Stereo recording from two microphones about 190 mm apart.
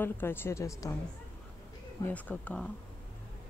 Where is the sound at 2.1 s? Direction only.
5° left (ahead or behind).